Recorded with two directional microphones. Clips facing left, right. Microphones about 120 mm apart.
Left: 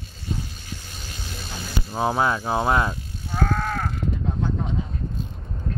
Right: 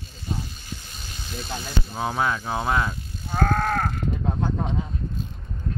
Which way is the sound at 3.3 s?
50° right (ahead or behind).